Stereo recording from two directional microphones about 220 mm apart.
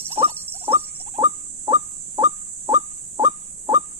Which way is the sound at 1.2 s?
15° right (ahead or behind).